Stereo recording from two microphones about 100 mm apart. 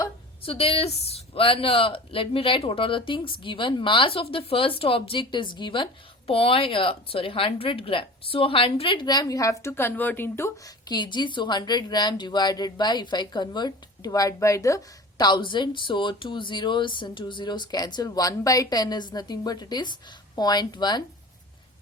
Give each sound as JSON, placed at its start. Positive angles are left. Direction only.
{"t": 0.4, "sound": "a woman's voice", "side_deg": 70}
{"t": 9.0, "sound": "a woman's voice", "side_deg": 40}
{"t": 10.8, "sound": "speech", "side_deg": 45}
{"t": 15.3, "sound": "speech", "side_deg": 55}